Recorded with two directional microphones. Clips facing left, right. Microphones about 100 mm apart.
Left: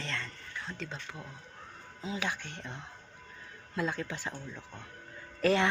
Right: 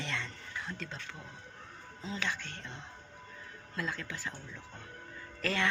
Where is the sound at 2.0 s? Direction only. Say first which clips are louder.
Left 2 dB; 10° left (ahead or behind).